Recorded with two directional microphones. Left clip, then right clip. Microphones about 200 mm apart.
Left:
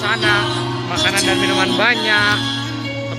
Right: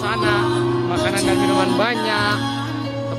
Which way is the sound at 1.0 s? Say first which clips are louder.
Left 5 dB; 5° right (ahead or behind).